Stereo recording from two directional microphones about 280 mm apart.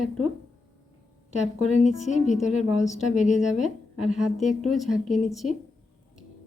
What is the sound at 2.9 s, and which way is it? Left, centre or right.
Speech, left.